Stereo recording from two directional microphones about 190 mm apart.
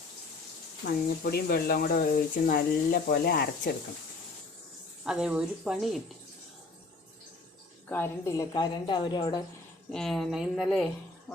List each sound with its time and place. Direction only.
0.8 s speech: 65° left (ahead or behind)
1.2 s speech: 55° left (ahead or behind)
5.0 s speech: 5° right (ahead or behind)
7.9 s a woman's voice: 10° left (ahead or behind)
9.9 s speech: centre (ahead or behind)